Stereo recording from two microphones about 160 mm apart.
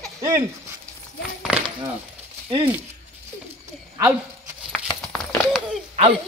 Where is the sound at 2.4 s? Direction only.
30° right (ahead or behind).